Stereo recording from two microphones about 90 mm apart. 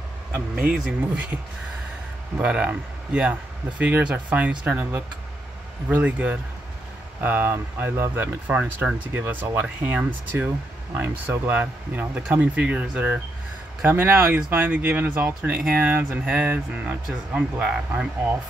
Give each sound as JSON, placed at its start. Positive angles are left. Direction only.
{"t": 0.3, "sound": "speech", "side_deg": -15}
{"t": 5.9, "sound": "speech", "side_deg": -20}